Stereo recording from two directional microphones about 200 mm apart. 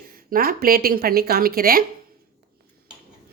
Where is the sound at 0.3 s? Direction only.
45° right (ahead or behind).